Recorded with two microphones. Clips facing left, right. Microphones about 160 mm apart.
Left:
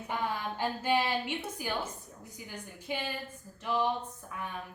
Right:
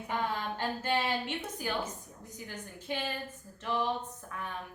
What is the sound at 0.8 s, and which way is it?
Speech, 10° left (ahead or behind).